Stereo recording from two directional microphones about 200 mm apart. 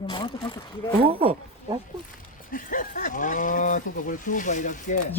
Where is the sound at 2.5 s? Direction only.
45° left (ahead or behind).